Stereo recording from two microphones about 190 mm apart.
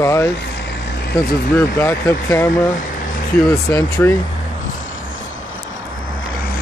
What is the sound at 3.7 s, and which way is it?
Speech, 15° left (ahead or behind).